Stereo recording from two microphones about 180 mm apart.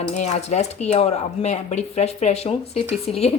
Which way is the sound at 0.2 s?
40° left (ahead or behind).